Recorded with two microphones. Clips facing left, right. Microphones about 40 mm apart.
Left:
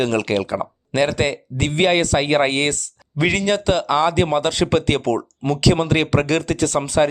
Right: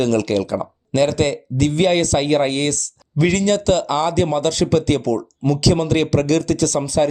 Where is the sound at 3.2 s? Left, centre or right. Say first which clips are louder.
Right 2 dB; centre.